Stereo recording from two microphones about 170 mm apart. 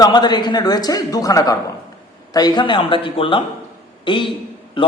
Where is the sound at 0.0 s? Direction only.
25° left (ahead or behind).